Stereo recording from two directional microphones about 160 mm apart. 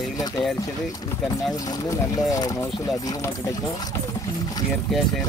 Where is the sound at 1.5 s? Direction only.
25° left (ahead or behind).